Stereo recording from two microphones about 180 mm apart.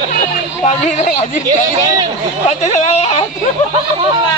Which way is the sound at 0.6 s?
40° left (ahead or behind).